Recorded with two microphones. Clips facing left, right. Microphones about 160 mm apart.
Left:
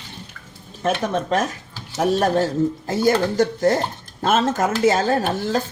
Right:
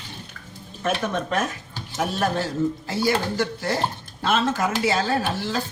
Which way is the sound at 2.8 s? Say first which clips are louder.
Left 5 dB; 45° left (ahead or behind).